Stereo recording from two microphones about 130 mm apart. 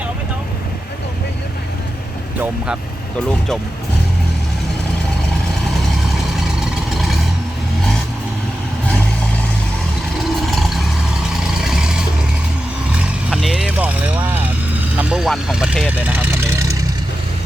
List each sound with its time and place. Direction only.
6.3 s vehicle: centre (ahead or behind)
10.4 s vehicle: centre (ahead or behind)
16.1 s vehicle: 15° right (ahead or behind)